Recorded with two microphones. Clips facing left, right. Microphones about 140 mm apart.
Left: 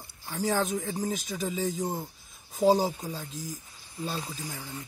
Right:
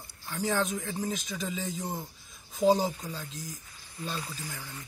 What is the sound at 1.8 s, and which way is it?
Speech, 25° left (ahead or behind).